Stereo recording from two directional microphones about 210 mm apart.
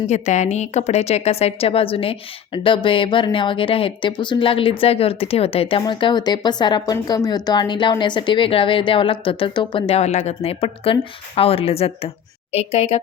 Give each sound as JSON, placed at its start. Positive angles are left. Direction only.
{"t": 0.1, "sound": "a woman's voice", "side_deg": 35}